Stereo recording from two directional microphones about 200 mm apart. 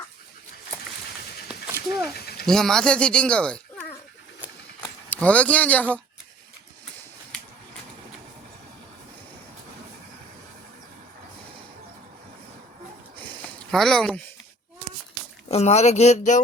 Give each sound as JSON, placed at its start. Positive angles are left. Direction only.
{"t": 2.1, "sound": "vehicle", "side_deg": 50}
{"t": 2.5, "sound": "speech", "side_deg": 5}
{"t": 5.0, "sound": "speech", "side_deg": 10}
{"t": 13.7, "sound": "speech", "side_deg": 0}
{"t": 15.4, "sound": "speech", "side_deg": 30}